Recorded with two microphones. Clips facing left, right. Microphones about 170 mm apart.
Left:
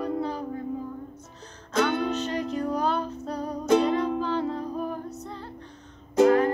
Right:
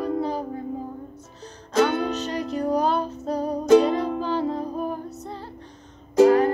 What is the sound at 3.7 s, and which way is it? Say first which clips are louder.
Music: right 5 dB; 10° right (ahead or behind).